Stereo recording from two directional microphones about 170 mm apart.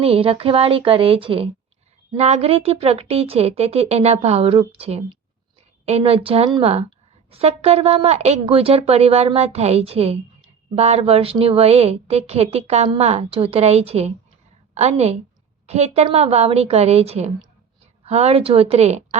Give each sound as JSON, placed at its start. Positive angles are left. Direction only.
{"t": 0.0, "sound": "a woman's voice", "side_deg": -35}